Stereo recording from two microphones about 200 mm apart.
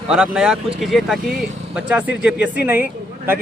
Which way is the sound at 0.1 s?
5° right (ahead or behind).